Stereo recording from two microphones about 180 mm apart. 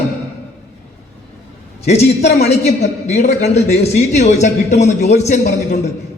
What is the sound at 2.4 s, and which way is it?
A man's voice, 40° left (ahead or behind).